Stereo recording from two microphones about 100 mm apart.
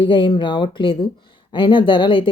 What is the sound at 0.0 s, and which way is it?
Speech, 55° left (ahead or behind).